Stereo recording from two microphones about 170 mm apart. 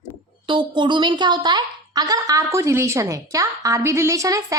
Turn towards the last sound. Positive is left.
turn(degrees=-20)  # may be behind; listen again after turning